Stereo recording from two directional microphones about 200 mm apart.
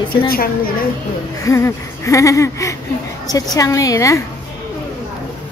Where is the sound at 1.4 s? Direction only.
15° left (ahead or behind).